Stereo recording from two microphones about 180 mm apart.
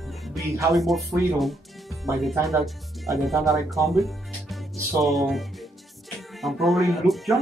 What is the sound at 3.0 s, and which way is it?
Speech, centre (ahead or behind).